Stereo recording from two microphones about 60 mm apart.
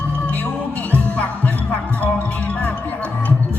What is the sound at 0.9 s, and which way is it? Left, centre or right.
Music, left.